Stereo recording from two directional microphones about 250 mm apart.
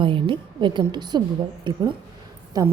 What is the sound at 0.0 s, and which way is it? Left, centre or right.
A woman's voice, centre.